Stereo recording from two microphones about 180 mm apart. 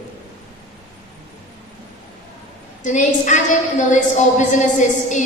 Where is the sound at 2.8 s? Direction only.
40° left (ahead or behind).